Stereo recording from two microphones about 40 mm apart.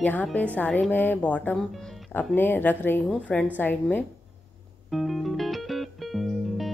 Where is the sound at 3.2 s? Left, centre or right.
Left.